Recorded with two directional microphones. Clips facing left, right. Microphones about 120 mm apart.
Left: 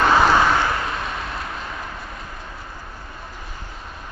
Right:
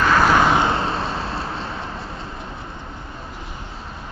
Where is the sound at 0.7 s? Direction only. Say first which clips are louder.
Right 3 dB; 30° right (ahead or behind).